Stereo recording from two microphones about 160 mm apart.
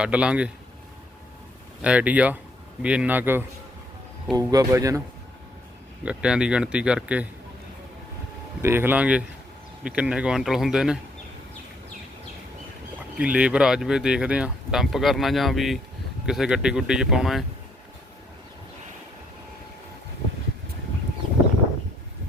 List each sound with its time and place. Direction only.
0.0 s speech: 5° right (ahead or behind)
1.8 s speech: 10° right (ahead or behind)
4.3 s speech: 25° right (ahead or behind)
6.0 s speech: 5° right (ahead or behind)
8.6 s speech: 15° right (ahead or behind)
13.1 s speech: 5° right (ahead or behind)